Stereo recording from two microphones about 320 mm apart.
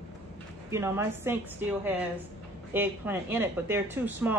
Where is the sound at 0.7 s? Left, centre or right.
Centre.